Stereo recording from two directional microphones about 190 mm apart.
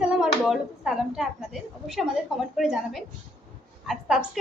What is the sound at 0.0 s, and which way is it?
A child's voice, 5° right (ahead or behind).